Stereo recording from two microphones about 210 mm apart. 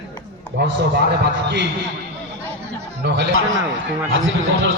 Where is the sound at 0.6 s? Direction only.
55° right (ahead or behind).